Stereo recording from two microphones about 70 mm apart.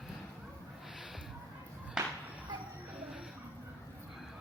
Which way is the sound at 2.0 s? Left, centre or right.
Centre.